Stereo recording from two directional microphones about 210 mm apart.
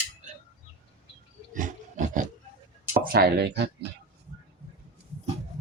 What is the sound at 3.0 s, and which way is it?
Speech, 45° right (ahead or behind).